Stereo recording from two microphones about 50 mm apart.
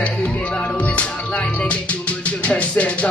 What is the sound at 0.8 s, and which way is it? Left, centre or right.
Music, left.